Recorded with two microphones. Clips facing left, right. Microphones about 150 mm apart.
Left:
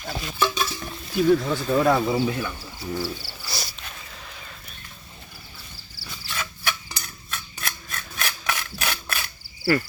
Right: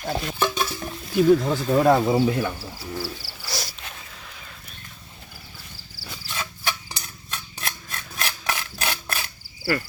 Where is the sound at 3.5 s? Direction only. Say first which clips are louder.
Right 3 dB; 90° right.